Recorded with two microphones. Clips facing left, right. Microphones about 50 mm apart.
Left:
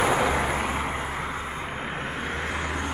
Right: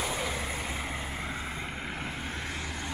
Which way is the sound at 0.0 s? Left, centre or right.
Left.